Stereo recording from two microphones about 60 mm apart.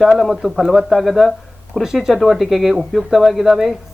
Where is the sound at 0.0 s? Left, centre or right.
Centre.